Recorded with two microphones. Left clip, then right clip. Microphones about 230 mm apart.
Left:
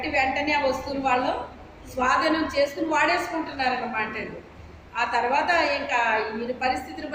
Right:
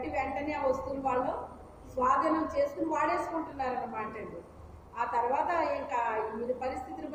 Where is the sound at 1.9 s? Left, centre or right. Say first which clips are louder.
Left 5 dB; centre.